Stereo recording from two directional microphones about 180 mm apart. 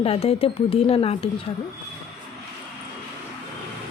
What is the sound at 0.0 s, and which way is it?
Speech, 35° left (ahead or behind).